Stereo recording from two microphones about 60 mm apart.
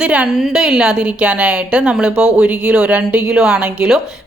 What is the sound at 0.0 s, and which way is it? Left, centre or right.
Speech, centre.